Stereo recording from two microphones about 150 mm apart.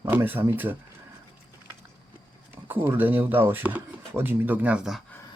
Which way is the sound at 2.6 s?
15° right (ahead or behind).